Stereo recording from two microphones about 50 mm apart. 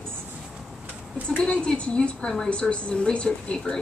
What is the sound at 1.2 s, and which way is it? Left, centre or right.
A woman's voice, left.